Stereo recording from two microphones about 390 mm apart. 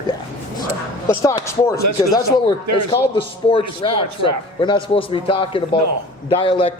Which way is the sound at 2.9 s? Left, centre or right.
Centre.